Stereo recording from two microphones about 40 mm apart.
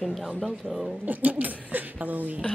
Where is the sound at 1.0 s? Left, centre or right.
Right.